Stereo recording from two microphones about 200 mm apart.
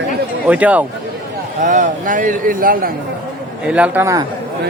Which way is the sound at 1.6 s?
40° right (ahead or behind).